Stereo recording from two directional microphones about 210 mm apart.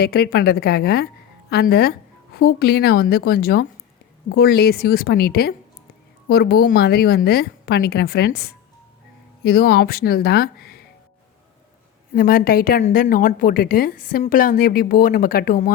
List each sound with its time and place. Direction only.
0.0 s a woman's voice: 50° left (ahead or behind)
12.1 s a woman's voice: 45° left (ahead or behind)